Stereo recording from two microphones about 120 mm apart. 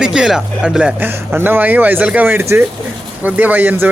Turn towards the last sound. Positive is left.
turn(degrees=-15)  # may be behind; listen again after turning